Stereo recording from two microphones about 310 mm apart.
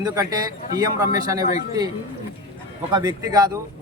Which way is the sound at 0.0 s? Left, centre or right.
Centre.